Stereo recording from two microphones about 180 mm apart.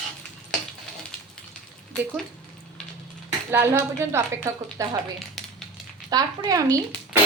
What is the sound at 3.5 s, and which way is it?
Speech, 15° right (ahead or behind).